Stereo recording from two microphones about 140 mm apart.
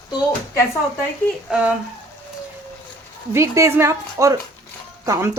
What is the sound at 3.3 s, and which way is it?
Speech, 20° right (ahead or behind).